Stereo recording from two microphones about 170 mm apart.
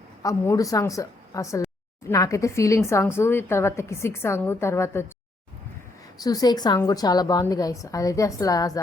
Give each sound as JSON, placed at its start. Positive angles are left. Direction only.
{"t": 0.2, "sound": "a woman's voice", "side_deg": 20}
{"t": 6.1, "sound": "a woman's voice", "side_deg": 20}